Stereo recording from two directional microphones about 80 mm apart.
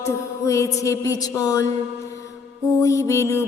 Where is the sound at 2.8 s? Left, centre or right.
Left.